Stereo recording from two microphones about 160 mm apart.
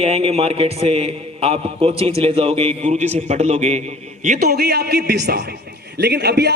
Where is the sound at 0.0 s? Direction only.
40° right (ahead or behind).